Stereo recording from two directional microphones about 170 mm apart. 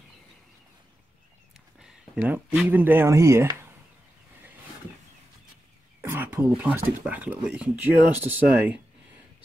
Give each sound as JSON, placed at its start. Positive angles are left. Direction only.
{"t": 1.8, "sound": "a sound", "side_deg": -10}
{"t": 2.7, "sound": "speech", "side_deg": -10}
{"t": 5.9, "sound": "speech", "side_deg": -10}